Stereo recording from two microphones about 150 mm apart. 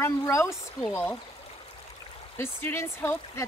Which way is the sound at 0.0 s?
20° left (ahead or behind).